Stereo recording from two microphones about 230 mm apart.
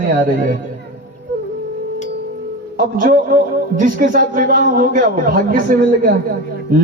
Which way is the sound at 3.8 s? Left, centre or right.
Right.